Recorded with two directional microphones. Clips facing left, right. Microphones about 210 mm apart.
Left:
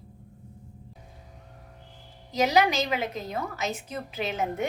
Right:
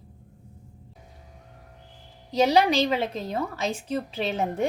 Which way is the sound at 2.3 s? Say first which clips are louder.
Right 3 dB; 30° right (ahead or behind).